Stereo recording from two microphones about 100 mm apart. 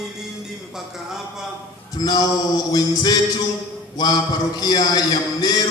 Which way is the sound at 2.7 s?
40° left (ahead or behind).